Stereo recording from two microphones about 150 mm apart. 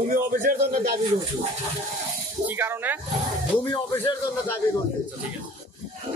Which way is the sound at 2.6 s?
15° right (ahead or behind).